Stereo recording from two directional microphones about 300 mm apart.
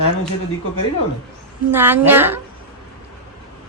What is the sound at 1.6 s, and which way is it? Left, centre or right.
Speech, centre.